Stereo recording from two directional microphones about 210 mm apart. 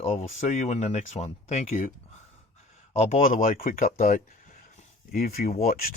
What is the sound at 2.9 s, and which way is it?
Speech, 35° left (ahead or behind).